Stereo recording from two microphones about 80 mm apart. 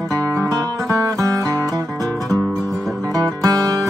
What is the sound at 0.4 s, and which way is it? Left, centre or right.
Music, right.